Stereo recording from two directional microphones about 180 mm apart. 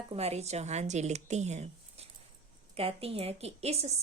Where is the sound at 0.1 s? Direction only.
35° right (ahead or behind).